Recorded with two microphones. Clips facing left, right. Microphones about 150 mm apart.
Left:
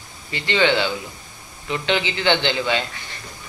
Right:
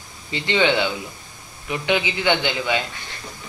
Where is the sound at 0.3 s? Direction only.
20° right (ahead or behind).